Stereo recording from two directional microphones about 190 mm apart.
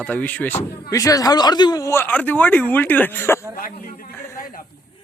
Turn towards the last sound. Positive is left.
turn(degrees=50)  # may be behind; listen again after turning